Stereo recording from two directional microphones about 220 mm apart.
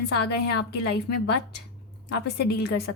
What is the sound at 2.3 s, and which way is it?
Speech, 50° left (ahead or behind).